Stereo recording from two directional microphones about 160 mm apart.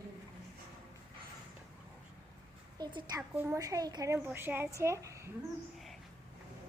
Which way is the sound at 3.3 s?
10° right (ahead or behind).